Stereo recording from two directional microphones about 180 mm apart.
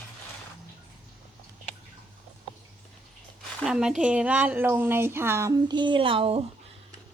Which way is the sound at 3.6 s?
5° right (ahead or behind).